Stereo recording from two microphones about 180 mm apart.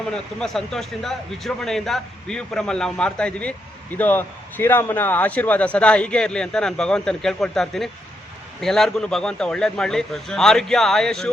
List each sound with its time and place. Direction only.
0.1 s a man's voice: 5° left (ahead or behind)